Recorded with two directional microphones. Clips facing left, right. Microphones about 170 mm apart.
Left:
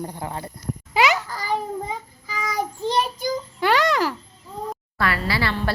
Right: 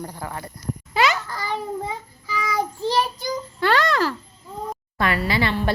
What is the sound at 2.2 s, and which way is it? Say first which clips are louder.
Child singing: right 3 dB; 40° left (ahead or behind).